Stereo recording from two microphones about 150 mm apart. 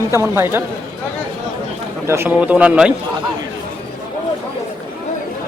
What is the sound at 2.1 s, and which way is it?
Speech, 15° right (ahead or behind).